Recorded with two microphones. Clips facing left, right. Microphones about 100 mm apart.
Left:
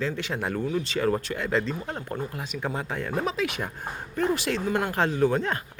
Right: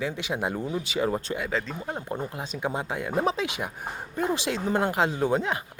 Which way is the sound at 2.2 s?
25° right (ahead or behind).